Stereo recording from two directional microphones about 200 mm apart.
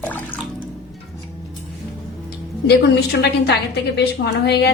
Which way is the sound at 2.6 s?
55° left (ahead or behind).